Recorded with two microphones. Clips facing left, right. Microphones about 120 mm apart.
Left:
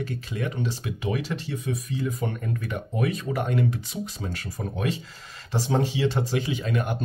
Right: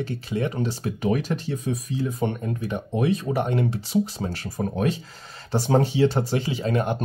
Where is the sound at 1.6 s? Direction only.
30° right (ahead or behind).